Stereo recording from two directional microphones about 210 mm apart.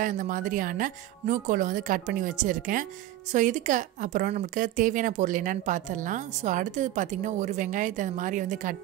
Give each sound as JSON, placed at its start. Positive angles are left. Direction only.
{"t": 0.0, "sound": "speech", "side_deg": -40}